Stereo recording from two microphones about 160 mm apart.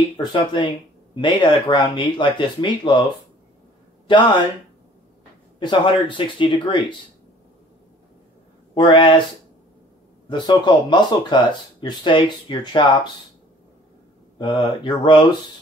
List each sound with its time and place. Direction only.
0.2 s speech: 30° left (ahead or behind)
4.1 s speech: 30° left (ahead or behind)
5.6 s speech: 30° left (ahead or behind)
8.7 s speech: 30° left (ahead or behind)
10.3 s speech: 25° left (ahead or behind)
14.4 s speech: 30° left (ahead or behind)